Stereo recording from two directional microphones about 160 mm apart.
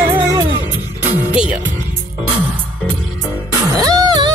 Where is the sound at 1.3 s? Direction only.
5° right (ahead or behind).